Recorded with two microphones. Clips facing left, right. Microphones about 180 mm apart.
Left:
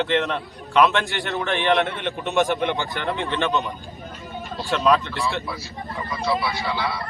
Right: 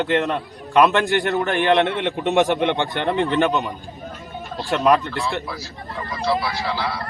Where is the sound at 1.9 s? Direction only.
65° right (ahead or behind).